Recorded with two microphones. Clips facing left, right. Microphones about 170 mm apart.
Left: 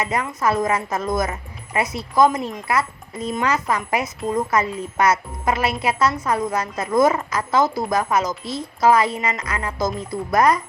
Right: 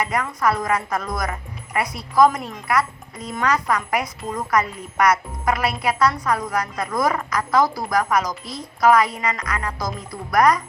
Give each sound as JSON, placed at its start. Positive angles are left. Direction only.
{"t": 0.0, "sound": "speech", "side_deg": 25}